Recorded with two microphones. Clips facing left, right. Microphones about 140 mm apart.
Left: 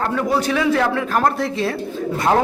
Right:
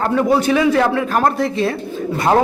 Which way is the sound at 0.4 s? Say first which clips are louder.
Right 3 dB; 5° right (ahead or behind).